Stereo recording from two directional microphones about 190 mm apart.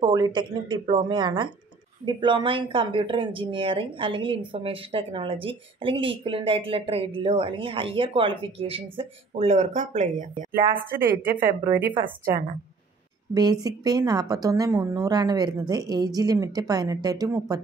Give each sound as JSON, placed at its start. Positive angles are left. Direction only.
{"t": 0.0, "sound": "speech", "side_deg": -20}
{"t": 10.9, "sound": "a woman's voice", "side_deg": -10}
{"t": 13.3, "sound": "speech", "side_deg": -20}